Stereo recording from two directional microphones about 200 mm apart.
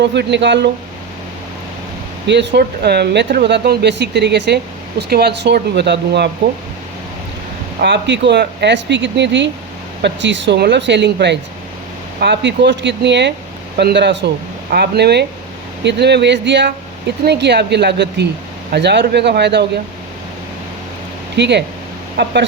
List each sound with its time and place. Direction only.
0.0 s speech: 60° right (ahead or behind)
2.2 s speech: 60° right (ahead or behind)
7.8 s speech: 60° right (ahead or behind)
21.3 s speech: 60° right (ahead or behind)